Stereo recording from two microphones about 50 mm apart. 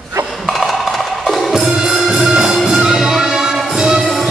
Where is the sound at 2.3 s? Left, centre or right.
Centre.